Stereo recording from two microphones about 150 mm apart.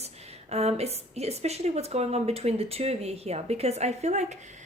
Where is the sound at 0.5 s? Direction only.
45° right (ahead or behind).